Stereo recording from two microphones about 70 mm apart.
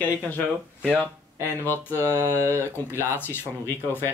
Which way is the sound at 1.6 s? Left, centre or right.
Left.